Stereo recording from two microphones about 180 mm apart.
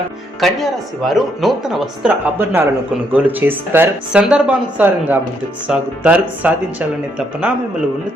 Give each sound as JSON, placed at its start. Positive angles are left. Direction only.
{"t": 0.3, "sound": "speech", "side_deg": 0}